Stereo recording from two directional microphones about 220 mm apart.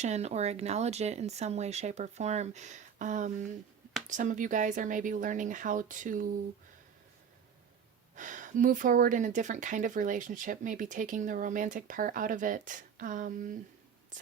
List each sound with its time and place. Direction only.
0.0 s speech: 30° right (ahead or behind)
8.1 s speech: 35° right (ahead or behind)